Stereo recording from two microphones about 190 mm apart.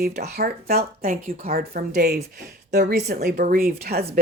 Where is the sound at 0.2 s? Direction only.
55° right (ahead or behind).